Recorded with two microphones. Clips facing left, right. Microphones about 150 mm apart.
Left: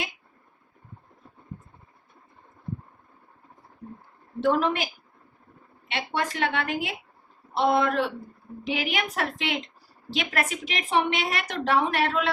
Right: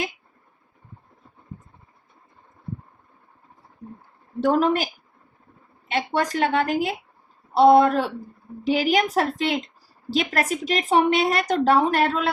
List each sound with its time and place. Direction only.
4.4 s a woman's voice: 40° right (ahead or behind)
5.9 s a woman's voice: 40° right (ahead or behind)